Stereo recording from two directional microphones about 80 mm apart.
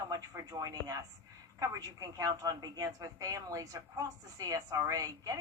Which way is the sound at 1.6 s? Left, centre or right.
Right.